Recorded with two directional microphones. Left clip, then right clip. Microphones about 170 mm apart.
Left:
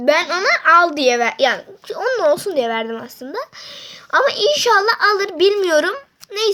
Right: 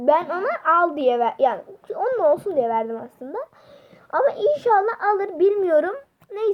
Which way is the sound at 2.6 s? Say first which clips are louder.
Left 2 dB; 35° left (ahead or behind).